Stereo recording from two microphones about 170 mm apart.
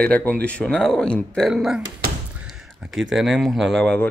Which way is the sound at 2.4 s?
5° right (ahead or behind).